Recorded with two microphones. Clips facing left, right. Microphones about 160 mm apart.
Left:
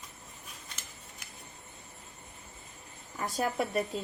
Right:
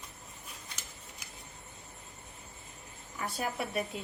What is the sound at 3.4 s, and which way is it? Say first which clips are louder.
Speech: left 5 dB; 40° left (ahead or behind).